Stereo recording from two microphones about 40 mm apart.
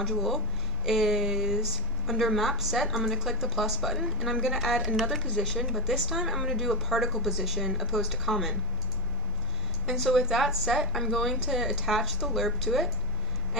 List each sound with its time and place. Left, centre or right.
0.8 s a sound: centre
2.0 s speech: centre
5.2 s speech: centre
5.5 s speech: centre
9.8 s speech: centre
11.4 s speech: centre